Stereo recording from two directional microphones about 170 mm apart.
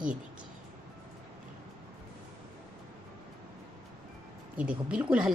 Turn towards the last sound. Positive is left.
turn(degrees=-5)  # may be behind; listen again after turning